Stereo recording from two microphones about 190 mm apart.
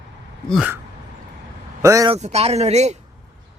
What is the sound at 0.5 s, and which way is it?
Speech, 5° right (ahead or behind).